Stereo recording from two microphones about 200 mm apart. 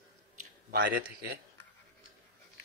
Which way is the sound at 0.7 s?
50° right (ahead or behind).